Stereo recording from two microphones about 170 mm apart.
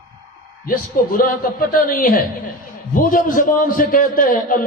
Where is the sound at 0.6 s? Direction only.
55° left (ahead or behind).